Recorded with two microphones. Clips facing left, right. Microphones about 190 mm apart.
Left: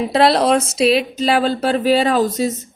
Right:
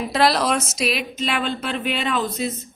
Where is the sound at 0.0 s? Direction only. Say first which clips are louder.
Left 5 dB; 30° left (ahead or behind).